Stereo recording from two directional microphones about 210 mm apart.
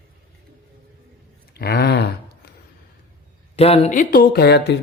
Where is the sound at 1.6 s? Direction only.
50° left (ahead or behind).